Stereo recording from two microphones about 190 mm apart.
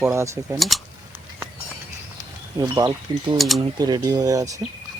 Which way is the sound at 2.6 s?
20° right (ahead or behind).